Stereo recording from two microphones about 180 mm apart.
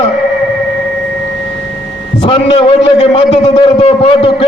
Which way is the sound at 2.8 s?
30° left (ahead or behind).